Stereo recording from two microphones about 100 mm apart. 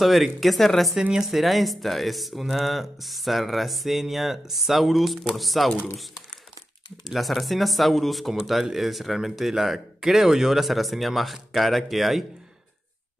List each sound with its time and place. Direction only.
0.0 s speech: centre (ahead or behind)
7.1 s speech: centre (ahead or behind)